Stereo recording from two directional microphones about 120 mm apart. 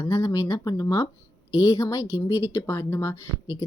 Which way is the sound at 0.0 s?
25° left (ahead or behind).